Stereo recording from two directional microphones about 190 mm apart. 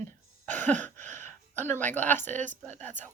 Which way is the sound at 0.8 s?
10° left (ahead or behind).